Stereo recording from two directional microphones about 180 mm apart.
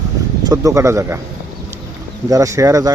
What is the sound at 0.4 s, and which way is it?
Speech, 20° right (ahead or behind).